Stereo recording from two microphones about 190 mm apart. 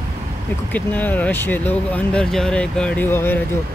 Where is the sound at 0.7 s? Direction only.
10° left (ahead or behind).